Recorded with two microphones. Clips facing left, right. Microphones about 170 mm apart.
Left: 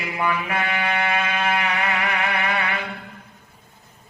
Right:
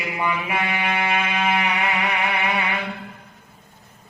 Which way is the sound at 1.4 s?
15° right (ahead or behind).